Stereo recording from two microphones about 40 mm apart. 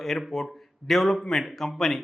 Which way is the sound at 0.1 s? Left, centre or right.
Centre.